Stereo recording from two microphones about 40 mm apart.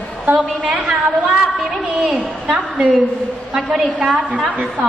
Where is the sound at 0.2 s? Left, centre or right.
Right.